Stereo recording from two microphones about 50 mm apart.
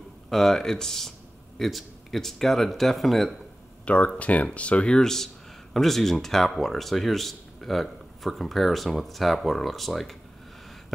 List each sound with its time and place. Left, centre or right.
0.3 s speech: centre
3.8 s speech: left; by 10.1 s centre